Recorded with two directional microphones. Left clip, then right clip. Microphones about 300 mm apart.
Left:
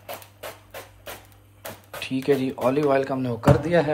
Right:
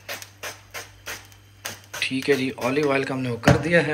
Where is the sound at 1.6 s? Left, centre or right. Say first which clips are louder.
Right 6 dB; centre.